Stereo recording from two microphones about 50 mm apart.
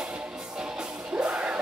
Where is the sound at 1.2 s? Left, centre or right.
Right.